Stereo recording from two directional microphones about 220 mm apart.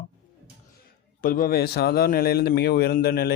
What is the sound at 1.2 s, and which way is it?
Speech, 40° left (ahead or behind).